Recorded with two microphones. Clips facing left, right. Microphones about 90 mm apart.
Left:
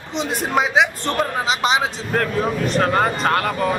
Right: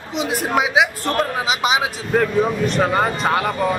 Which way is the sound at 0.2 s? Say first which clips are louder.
Right 1 dB; 5° right (ahead or behind).